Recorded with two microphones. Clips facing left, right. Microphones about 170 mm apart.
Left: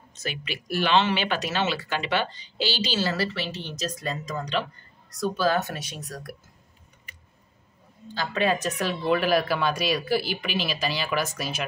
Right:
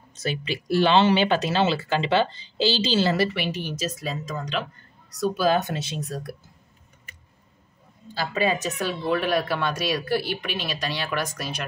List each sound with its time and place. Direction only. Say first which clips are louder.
0.1 s speech: right 5 dB; 30° right (ahead or behind); by 5.4 s centre (ahead or behind)
5.4 s speech: right 2 dB; 15° right (ahead or behind)
8.1 s speech: right 1 dB; 5° right (ahead or behind)